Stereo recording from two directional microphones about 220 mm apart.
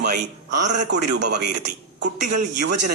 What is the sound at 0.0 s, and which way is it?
Speech, 50° right (ahead or behind).